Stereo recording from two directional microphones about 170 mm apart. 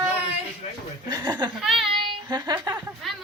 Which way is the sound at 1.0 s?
25° right (ahead or behind).